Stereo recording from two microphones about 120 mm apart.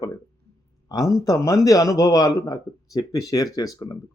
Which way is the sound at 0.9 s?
30° left (ahead or behind).